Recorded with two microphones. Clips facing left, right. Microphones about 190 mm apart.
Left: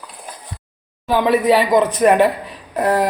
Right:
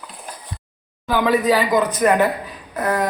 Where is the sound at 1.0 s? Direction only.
25° left (ahead or behind).